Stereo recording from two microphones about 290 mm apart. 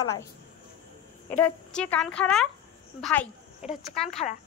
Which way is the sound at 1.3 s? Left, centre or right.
Centre.